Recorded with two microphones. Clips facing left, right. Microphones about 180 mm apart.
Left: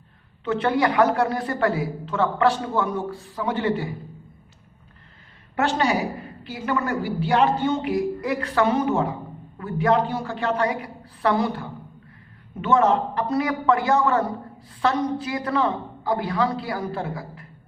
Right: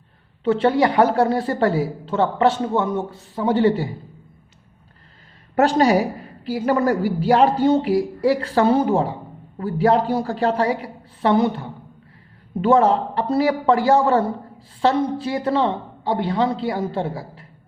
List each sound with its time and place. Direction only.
0.4 s speech: 30° right (ahead or behind)
5.5 s a woman's voice: 40° right (ahead or behind); by 11.7 s 20° right (ahead or behind)
12.6 s a woman's voice: 35° right (ahead or behind)